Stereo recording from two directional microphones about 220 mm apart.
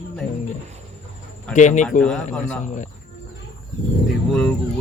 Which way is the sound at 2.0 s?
5° left (ahead or behind).